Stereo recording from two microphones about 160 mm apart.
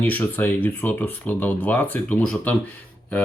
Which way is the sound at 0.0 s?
10° left (ahead or behind).